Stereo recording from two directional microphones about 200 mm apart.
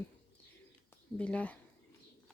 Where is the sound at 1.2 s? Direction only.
5° left (ahead or behind).